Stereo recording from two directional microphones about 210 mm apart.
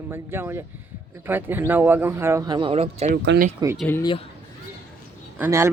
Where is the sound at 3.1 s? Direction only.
50° right (ahead or behind).